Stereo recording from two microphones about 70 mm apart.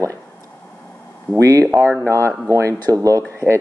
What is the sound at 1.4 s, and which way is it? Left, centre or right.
Speech, right.